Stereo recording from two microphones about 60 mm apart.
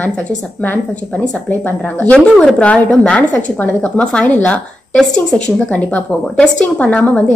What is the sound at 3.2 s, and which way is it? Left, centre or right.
A woman's voice, left.